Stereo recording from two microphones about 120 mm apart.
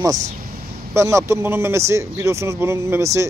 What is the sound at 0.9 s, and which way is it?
Speech, 25° right (ahead or behind).